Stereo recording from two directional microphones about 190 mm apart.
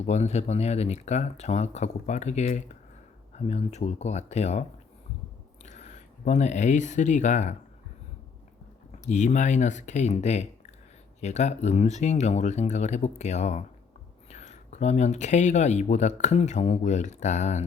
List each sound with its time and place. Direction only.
0.0 s speech: 35° left (ahead or behind)
5.6 s speech: 35° left (ahead or behind)
9.0 s speech: 40° left (ahead or behind)